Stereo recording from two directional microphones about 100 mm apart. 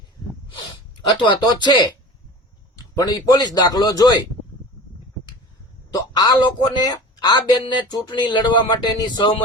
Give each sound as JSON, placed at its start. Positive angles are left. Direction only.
{"t": 1.1, "sound": "a man's voice", "side_deg": 50}
{"t": 5.9, "sound": "speech", "side_deg": 45}